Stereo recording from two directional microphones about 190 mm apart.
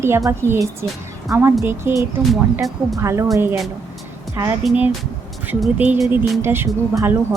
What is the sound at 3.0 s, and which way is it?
Speech, 15° right (ahead or behind).